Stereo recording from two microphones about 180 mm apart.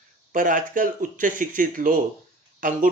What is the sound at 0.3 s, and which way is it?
Speech, 50° right (ahead or behind).